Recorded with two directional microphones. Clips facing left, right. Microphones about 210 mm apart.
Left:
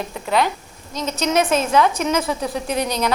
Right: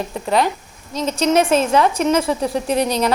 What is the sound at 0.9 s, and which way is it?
Speech, 30° right (ahead or behind).